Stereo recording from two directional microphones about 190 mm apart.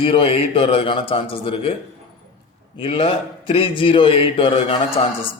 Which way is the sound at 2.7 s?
30° left (ahead or behind).